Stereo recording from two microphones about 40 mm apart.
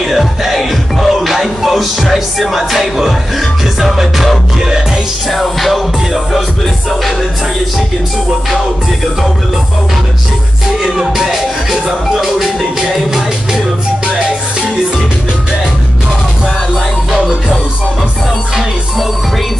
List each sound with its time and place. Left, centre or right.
0.0 s music: centre
5.3 s music: centre
10.8 s music: centre
14.0 s music: right